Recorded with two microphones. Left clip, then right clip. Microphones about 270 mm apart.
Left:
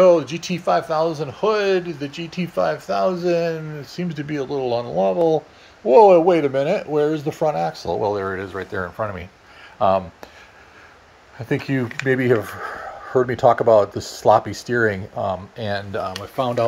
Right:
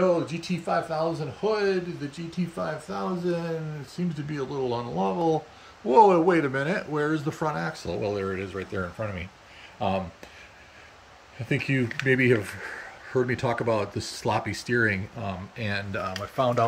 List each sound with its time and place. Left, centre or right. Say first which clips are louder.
0.0 s speech: left 10 dB; centre
11.4 s speech: left 4 dB; centre
12.5 s a sound: left 7 dB; centre
13.7 s speech: left 12 dB; centre